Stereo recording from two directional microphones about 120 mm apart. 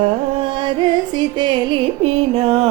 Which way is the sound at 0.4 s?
40° right (ahead or behind).